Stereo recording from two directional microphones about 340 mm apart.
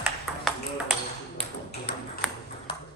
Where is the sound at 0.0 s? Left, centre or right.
Centre.